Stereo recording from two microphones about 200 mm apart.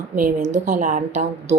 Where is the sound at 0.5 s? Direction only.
40° right (ahead or behind).